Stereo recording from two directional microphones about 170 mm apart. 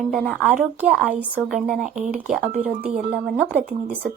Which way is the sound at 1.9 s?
45° right (ahead or behind).